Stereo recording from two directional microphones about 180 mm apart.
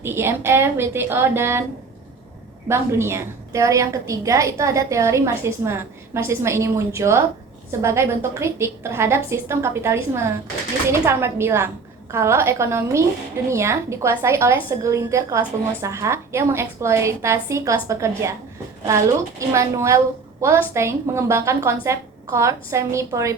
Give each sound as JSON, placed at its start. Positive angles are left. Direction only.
{"t": 0.0, "sound": "a woman's voice", "side_deg": -15}
{"t": 2.6, "sound": "a woman's voice", "side_deg": -15}
{"t": 19.4, "sound": "a woman's voice", "side_deg": -15}